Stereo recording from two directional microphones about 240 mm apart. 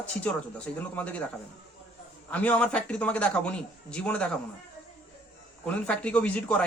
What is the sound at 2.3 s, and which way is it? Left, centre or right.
A man's voice, centre.